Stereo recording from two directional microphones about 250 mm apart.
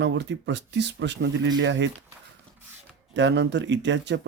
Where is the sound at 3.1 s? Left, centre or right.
Right.